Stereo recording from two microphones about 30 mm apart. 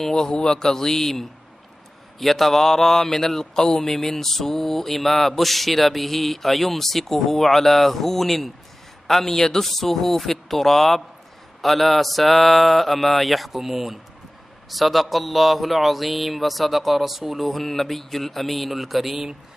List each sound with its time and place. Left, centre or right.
0.3 s a man's voice: left
0.6 s speech: centre
2.1 s speech: centre